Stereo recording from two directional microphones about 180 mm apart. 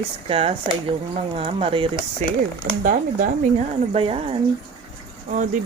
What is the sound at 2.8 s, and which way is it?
Speech, 50° right (ahead or behind).